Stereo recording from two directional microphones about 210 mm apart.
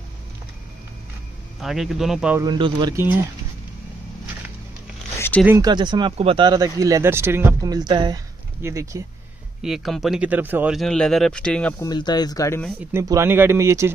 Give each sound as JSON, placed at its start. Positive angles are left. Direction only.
{"t": 1.6, "sound": "speech", "side_deg": 0}
{"t": 2.4, "sound": "speech", "side_deg": -20}
{"t": 5.6, "sound": "speech", "side_deg": -20}
{"t": 9.6, "sound": "speech", "side_deg": 0}
{"t": 11.8, "sound": "speech", "side_deg": 20}
{"t": 12.9, "sound": "speech", "side_deg": -10}